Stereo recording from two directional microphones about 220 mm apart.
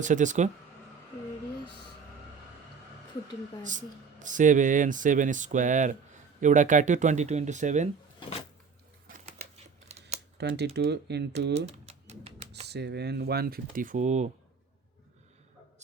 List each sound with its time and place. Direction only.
0.0 s speech: 35° right (ahead or behind)
3.6 s speech: 35° right (ahead or behind)
8.2 s a sound: 25° left (ahead or behind)
9.0 s a sound: 30° right (ahead or behind)
9.9 s computer keyboard: 30° right (ahead or behind)
10.3 s speech: 50° right (ahead or behind)
11.5 s typing: 30° right (ahead or behind)
12.6 s speech: 50° right (ahead or behind); by 14.3 s 30° right (ahead or behind)